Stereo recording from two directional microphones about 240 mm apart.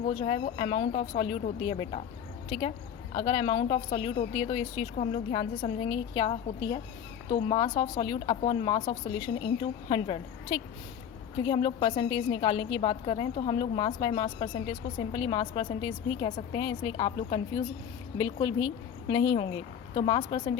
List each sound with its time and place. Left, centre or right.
0.0 s a woman's voice: left